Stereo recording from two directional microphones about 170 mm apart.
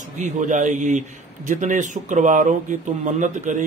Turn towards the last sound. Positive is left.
turn(degrees=-45)  # may be behind; listen again after turning